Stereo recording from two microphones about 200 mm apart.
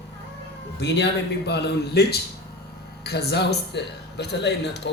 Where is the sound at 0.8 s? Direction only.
60° left (ahead or behind).